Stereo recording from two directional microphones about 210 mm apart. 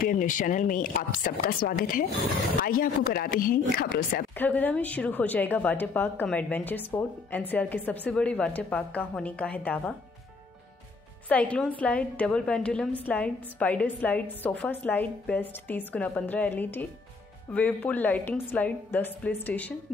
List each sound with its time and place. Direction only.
0.0 s speech: 40° left (ahead or behind)
4.4 s a woman's voice: 10° left (ahead or behind)
11.2 s a woman's voice: 5° left (ahead or behind)